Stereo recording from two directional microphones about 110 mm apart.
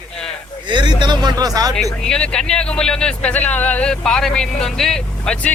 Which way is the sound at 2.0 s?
10° left (ahead or behind).